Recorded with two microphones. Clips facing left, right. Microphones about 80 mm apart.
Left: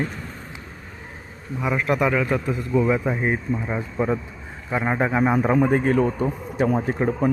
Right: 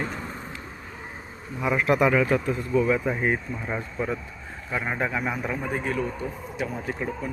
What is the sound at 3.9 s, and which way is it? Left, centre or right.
A man's voice, left.